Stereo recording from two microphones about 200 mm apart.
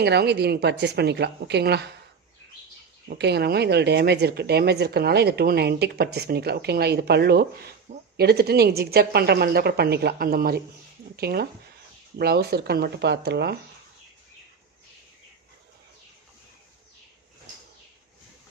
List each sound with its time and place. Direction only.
0.0 s a woman's voice: 55° right (ahead or behind)
3.1 s a woman's voice: 55° right (ahead or behind)